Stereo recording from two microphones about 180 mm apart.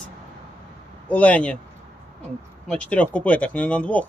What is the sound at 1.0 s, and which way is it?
Speech, 5° left (ahead or behind).